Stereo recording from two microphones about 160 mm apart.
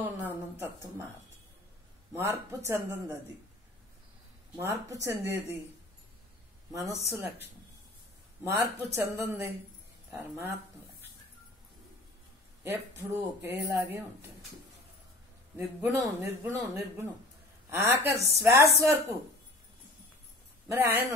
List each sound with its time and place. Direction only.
0.0 s a sound: 10° right (ahead or behind)
2.1 s a man's voice: 15° right (ahead or behind)
4.6 s a man's voice: 15° right (ahead or behind)
6.7 s a man's voice: 15° right (ahead or behind)
8.5 s a man's voice: 15° right (ahead or behind)
12.6 s a man's voice: 15° right (ahead or behind)
15.5 s a man's voice: 15° right (ahead or behind)
20.6 s speech: 15° right (ahead or behind)